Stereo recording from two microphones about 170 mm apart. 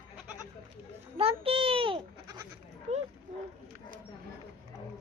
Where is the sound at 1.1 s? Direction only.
35° right (ahead or behind).